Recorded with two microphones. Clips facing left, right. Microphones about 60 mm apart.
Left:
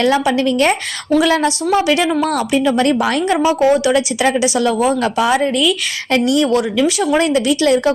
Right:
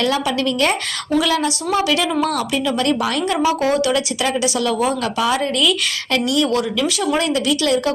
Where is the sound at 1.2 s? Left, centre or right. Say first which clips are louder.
Left 5 dB; left.